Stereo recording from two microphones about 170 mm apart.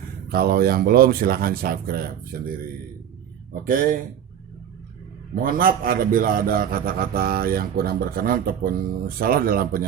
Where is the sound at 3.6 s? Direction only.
50° right (ahead or behind).